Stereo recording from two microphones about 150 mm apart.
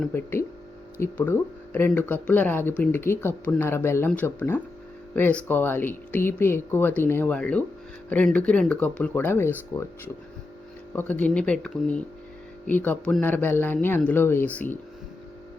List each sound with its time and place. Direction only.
0.1 s speech: 15° left (ahead or behind)
10.9 s speech: 10° left (ahead or behind)